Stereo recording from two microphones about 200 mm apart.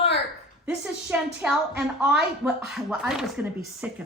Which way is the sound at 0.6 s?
5° right (ahead or behind).